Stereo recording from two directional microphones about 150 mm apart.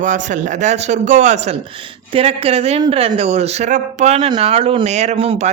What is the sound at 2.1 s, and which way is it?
Speech, 40° right (ahead or behind).